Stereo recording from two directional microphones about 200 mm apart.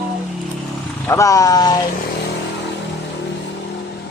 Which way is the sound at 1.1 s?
15° left (ahead or behind).